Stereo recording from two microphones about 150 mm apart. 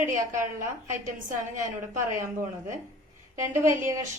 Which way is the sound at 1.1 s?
60° right (ahead or behind).